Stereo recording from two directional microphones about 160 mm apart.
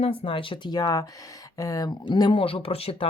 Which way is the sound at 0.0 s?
35° left (ahead or behind).